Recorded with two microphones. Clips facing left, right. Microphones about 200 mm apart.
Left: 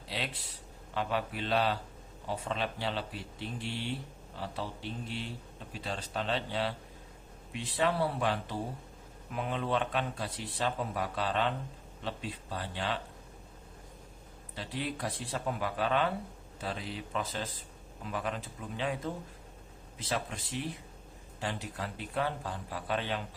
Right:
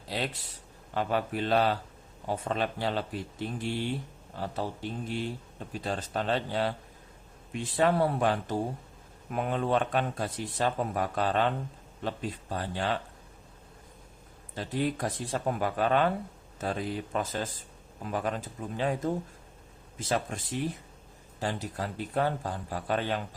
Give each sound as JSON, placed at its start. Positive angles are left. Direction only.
{"t": 0.9, "sound": "speech", "side_deg": -45}
{"t": 14.5, "sound": "speech", "side_deg": -45}